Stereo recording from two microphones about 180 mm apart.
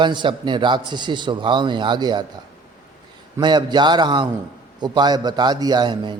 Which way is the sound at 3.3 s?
25° right (ahead or behind).